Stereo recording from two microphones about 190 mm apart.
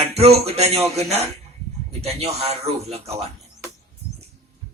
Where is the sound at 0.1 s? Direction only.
35° right (ahead or behind).